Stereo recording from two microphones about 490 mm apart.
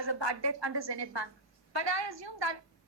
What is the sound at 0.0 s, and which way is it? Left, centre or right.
A woman's voice, right.